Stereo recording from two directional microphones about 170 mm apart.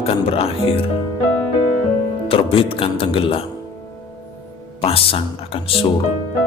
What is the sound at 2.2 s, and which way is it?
Speech, 35° left (ahead or behind).